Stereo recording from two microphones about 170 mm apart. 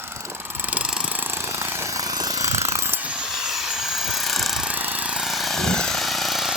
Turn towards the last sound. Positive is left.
turn(degrees=0)  # may be behind; listen again after turning